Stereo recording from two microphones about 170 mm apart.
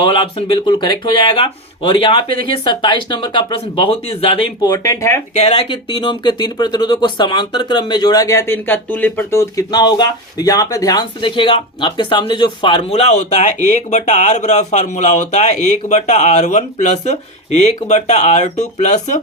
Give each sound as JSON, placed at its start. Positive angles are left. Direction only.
{"t": 0.0, "sound": "speech", "side_deg": 30}
{"t": 4.6, "sound": "speech", "side_deg": 20}
{"t": 5.3, "sound": "speech", "side_deg": 40}
{"t": 5.9, "sound": "speech", "side_deg": 25}